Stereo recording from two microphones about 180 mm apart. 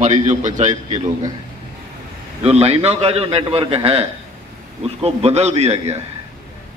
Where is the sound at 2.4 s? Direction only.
35° right (ahead or behind).